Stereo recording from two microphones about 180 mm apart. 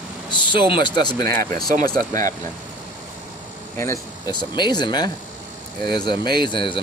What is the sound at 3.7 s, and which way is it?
Speech, 15° left (ahead or behind).